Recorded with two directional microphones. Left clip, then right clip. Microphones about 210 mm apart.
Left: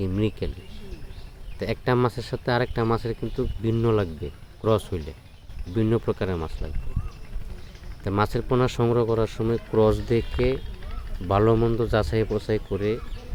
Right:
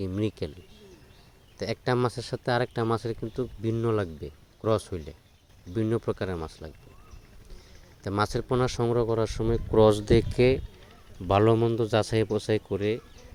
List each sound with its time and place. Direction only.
0.0 s speech: 35° right (ahead or behind)
1.5 s speech: 35° right (ahead or behind)
8.0 s speech: 30° right (ahead or behind)